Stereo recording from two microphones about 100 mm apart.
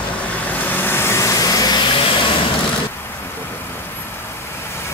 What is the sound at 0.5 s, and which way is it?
Vehicle, 20° left (ahead or behind).